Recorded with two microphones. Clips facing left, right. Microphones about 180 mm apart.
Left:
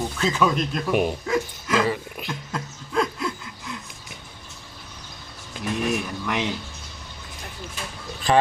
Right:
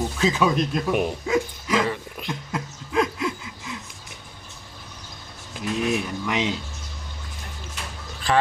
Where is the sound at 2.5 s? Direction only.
10° right (ahead or behind).